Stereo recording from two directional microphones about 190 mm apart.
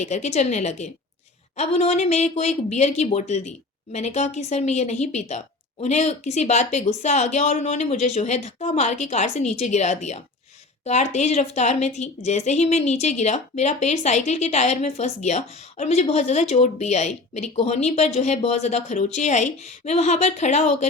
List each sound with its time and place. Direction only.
0.0 s a woman's voice: 35° left (ahead or behind)